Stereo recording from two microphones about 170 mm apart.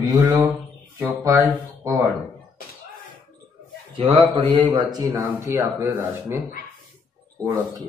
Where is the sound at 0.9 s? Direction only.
20° right (ahead or behind).